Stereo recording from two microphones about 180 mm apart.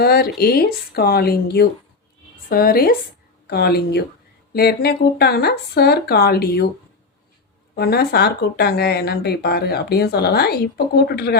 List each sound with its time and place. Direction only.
0.0 s speech: 60° left (ahead or behind)
7.8 s speech: 60° left (ahead or behind)